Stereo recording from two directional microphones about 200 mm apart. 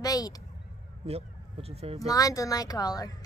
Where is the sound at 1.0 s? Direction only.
30° right (ahead or behind).